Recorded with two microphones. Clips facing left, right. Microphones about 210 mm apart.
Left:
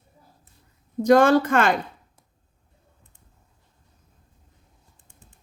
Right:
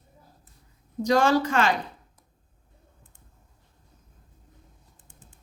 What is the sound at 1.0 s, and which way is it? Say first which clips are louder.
Speech: left 5 dB; 55° left (ahead or behind).